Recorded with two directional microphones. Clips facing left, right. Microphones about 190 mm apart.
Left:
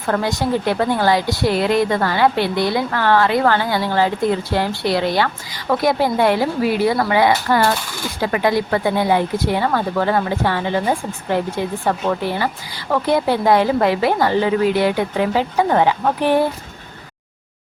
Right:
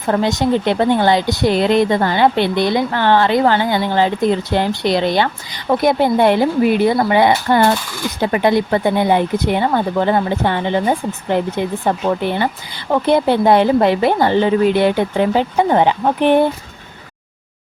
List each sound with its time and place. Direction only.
0.0 s speech: 20° right (ahead or behind)